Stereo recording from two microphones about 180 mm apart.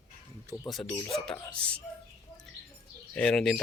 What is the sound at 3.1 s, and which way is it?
Speech, 5° left (ahead or behind).